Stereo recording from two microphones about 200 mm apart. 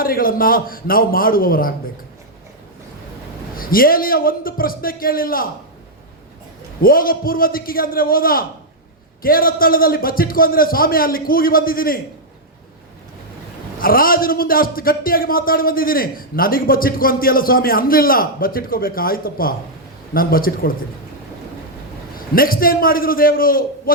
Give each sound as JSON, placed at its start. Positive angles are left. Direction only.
{"t": 0.0, "sound": "a man's voice", "side_deg": 45}
{"t": 3.5, "sound": "a man's voice", "side_deg": 45}
{"t": 6.8, "sound": "a man's voice", "side_deg": 45}
{"t": 13.7, "sound": "a man's voice", "side_deg": 45}
{"t": 22.4, "sound": "a man's voice", "side_deg": 45}